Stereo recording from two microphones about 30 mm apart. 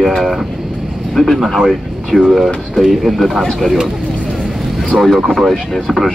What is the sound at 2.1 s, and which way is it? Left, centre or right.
Speech, left.